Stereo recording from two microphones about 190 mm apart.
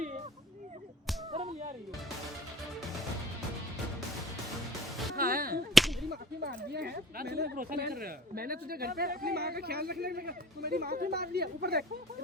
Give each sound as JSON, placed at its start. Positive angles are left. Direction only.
{"t": 1.3, "sound": "whip", "side_deg": -35}
{"t": 5.1, "sound": "whip", "side_deg": -50}
{"t": 5.7, "sound": "whip", "side_deg": 0}
{"t": 6.1, "sound": "speech", "side_deg": -50}